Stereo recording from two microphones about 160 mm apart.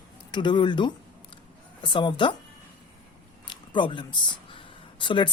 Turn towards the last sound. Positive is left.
turn(degrees=30)  # may be behind; listen again after turning